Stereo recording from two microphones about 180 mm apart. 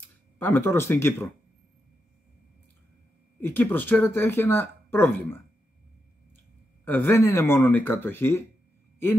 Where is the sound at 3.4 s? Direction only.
10° left (ahead or behind).